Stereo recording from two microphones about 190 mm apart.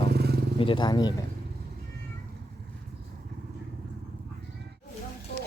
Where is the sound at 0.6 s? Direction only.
25° left (ahead or behind).